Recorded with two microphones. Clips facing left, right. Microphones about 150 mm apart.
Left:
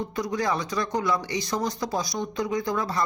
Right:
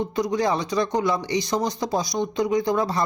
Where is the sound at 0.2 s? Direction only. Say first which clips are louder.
Right 4 dB; 20° right (ahead or behind).